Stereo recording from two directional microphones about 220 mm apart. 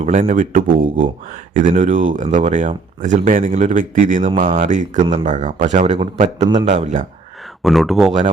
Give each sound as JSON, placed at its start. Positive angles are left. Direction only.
{"t": 0.0, "sound": "speech", "side_deg": -35}
{"t": 7.6, "sound": "speech", "side_deg": 0}